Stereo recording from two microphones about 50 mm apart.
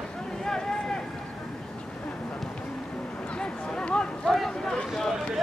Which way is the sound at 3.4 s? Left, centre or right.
Centre.